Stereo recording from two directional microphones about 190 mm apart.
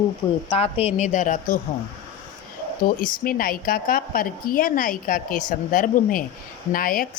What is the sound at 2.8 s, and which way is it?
Speech, 50° left (ahead or behind).